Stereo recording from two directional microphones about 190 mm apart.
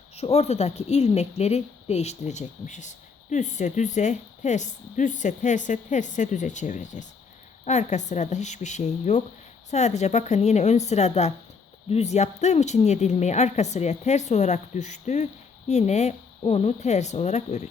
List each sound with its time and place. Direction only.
0.2 s speech: 35° left (ahead or behind)